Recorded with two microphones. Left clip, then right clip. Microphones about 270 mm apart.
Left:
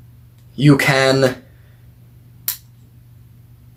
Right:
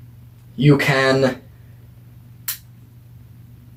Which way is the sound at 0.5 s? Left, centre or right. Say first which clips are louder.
Left 2 dB; left.